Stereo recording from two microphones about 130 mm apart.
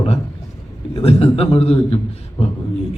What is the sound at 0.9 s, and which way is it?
A man's voice, 50° left (ahead or behind).